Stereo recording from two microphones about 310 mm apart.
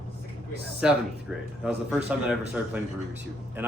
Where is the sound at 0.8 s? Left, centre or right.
Centre.